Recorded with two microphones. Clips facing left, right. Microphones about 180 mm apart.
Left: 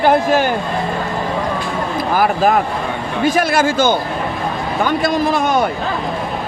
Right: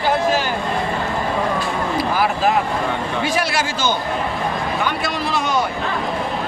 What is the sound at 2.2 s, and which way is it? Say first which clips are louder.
Speech: left 6 dB; 50° left (ahead or behind).